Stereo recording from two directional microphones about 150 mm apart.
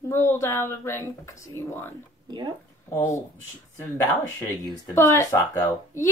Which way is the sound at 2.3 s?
25° right (ahead or behind).